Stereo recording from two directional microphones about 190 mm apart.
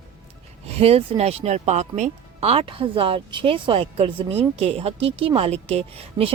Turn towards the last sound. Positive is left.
turn(degrees=-30)  # may be behind; listen again after turning